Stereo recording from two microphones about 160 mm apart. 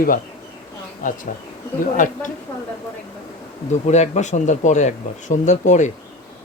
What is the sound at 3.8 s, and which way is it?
Speech, 40° left (ahead or behind).